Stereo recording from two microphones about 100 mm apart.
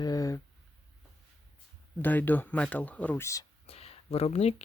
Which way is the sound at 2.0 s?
20° left (ahead or behind).